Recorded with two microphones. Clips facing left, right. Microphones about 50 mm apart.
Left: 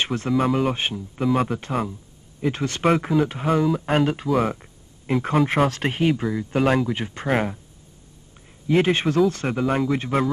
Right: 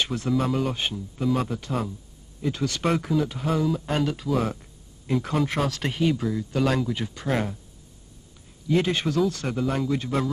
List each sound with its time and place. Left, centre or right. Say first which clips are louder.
0.0 s speech: left 3 dB; left
0.3 s speech: left 4 dB; centre
2.4 s speech: left 4 dB; left
4.3 s speech: left 3 dB; centre
4.6 s speech: left 2 dB; left
8.6 s speech: left 4 dB; left